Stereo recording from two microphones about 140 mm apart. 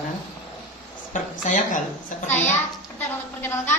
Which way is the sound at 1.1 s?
65° left (ahead or behind).